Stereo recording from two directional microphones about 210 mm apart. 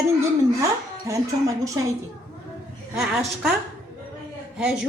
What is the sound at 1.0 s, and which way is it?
Speech, 15° right (ahead or behind).